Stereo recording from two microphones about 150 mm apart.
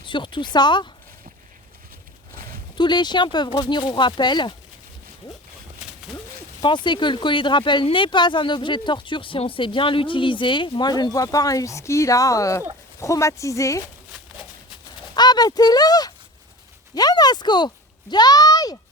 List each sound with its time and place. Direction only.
0.0 s speech: 35° left (ahead or behind)
2.7 s speech: 30° left (ahead or behind)
6.6 s speech: 30° left (ahead or behind)
15.1 s speech: 30° left (ahead or behind)